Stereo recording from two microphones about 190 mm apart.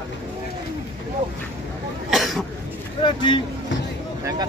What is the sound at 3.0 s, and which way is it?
Speech, 25° left (ahead or behind).